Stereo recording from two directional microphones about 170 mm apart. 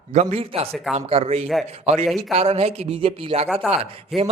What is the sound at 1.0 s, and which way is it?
A man's voice, 35° right (ahead or behind).